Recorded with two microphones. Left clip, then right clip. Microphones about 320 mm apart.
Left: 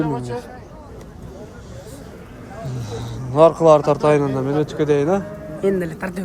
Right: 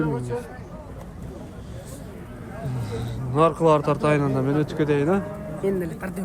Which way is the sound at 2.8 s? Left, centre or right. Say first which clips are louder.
Left 2 dB; centre.